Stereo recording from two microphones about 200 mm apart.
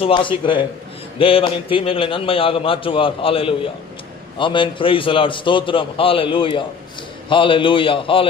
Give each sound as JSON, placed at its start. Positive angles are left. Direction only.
{"t": 0.0, "sound": "a man's voice", "side_deg": 25}